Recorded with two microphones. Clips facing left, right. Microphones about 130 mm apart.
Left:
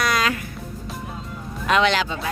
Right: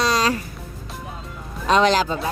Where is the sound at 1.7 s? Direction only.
35° right (ahead or behind).